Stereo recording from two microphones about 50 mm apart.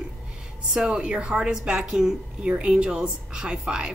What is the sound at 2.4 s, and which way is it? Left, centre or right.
A woman's voice, right.